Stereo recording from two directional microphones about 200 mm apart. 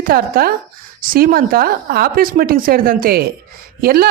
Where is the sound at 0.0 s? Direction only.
45° right (ahead or behind).